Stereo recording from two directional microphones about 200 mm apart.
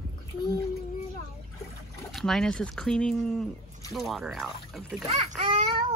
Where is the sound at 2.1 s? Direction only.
Centre (ahead or behind).